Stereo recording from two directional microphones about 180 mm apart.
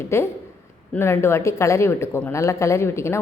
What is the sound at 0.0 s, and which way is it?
Speech, 15° left (ahead or behind).